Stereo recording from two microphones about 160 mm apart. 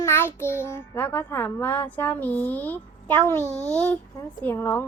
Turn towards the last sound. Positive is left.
turn(degrees=10)  # may be behind; listen again after turning